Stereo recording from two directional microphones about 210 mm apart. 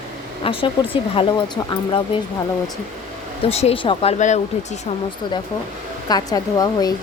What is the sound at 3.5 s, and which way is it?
Speech, 30° left (ahead or behind).